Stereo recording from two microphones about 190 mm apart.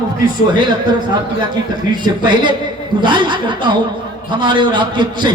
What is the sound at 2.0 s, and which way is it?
A man's voice, 25° right (ahead or behind).